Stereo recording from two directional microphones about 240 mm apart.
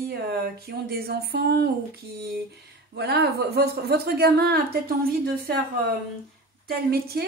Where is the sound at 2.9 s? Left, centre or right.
Right.